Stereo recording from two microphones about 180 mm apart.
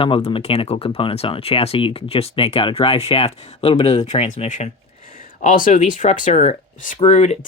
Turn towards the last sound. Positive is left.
turn(degrees=35)  # may be behind; listen again after turning